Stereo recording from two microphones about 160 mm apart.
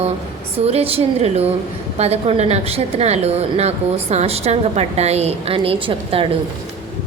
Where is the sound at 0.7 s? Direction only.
40° right (ahead or behind).